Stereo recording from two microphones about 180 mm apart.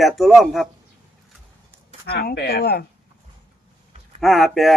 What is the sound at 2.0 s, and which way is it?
Speech, 60° left (ahead or behind).